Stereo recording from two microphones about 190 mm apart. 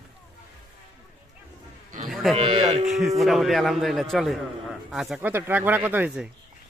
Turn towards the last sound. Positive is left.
turn(degrees=-10)  # may be behind; listen again after turning